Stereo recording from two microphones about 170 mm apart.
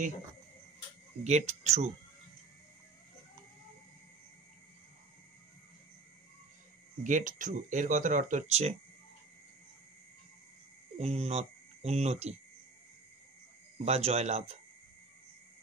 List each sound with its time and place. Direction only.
1.2 s speech: 40° right (ahead or behind)
7.0 s speech: 50° right (ahead or behind)
11.0 s speech: 40° right (ahead or behind)
13.7 s speech: 40° right (ahead or behind)